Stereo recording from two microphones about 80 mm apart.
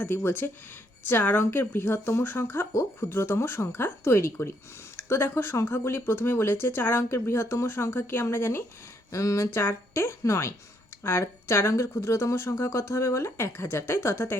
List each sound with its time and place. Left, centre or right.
0.0 s speech: left
9.1 s speech: left